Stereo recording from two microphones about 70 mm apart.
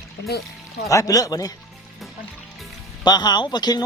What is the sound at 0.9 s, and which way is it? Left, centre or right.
Speech, left.